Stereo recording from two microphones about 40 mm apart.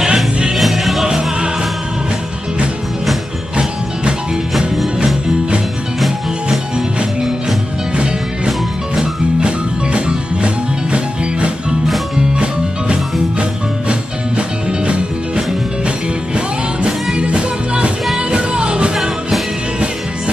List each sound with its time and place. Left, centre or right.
0.0 s music: centre
0.6 s music: centre
1.0 s music: right
5.9 s music: centre
9.9 s music: right